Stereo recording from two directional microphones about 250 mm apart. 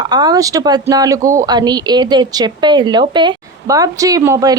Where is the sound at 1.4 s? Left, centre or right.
Centre.